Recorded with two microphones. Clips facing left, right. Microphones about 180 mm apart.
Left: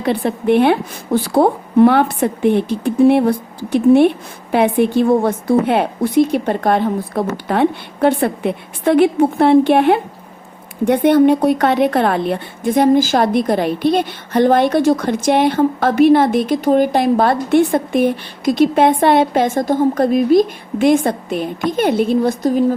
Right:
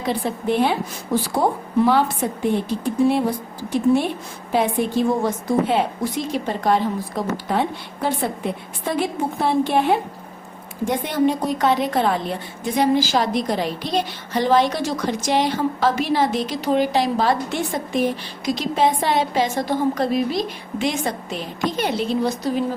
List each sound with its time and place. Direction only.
0.0 s a woman's voice: 65° left (ahead or behind)